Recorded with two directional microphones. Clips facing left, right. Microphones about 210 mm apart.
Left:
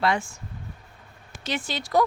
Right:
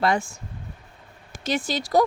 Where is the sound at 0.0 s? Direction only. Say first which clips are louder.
Right 2 dB; 45° right (ahead or behind).